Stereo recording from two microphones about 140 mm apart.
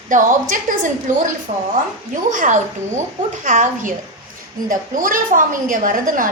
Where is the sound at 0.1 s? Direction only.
65° right (ahead or behind).